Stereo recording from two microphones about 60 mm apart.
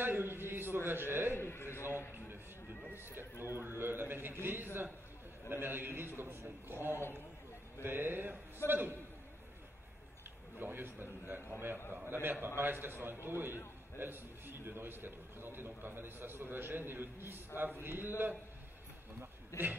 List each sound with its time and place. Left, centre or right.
0.0 s a sound: right
0.8 s a man's voice: right
1.3 s a man's voice: left
3.5 s a man's voice: right
10.6 s a man's voice: right
19.5 s a man's voice: left